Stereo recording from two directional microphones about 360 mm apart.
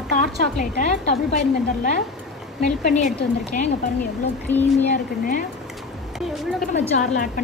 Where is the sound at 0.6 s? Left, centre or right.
Centre.